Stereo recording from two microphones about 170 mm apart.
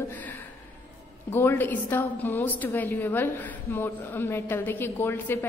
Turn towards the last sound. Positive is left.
turn(degrees=15)  # may be behind; listen again after turning